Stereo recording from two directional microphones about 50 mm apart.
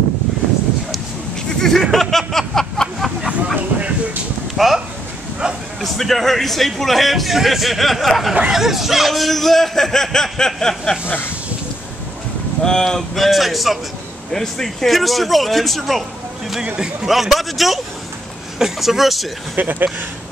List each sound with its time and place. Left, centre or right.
1.6 s a sound: centre
3.2 s a sound: right
3.5 s vehicle: right
4.6 s speech: centre
5.8 s a man's voice: centre
12.6 s a man's voice: centre
14.3 s a man's voice: centre
16.6 s speech: centre
17.1 s a man's voice: centre
19.5 s speech: right